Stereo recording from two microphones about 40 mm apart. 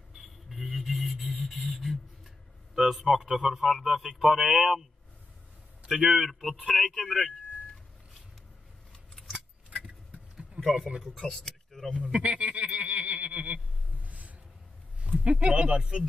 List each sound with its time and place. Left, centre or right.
0.1 s a sound: centre
3.1 s speech: centre
5.9 s a man's voice: centre
6.9 s speech: centre
9.7 s keys jangling: right
11.1 s speech: centre
12.1 s speech: right
14.0 s a sound: right
15.0 s speech: right